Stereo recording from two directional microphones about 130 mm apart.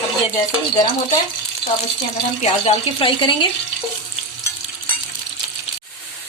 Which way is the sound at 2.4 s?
55° left (ahead or behind).